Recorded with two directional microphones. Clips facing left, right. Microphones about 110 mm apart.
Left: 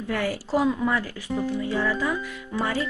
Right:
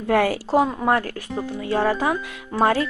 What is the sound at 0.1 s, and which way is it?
Speech, 90° right.